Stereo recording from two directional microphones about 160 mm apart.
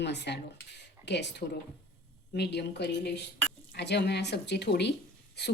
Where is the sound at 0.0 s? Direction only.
90° left.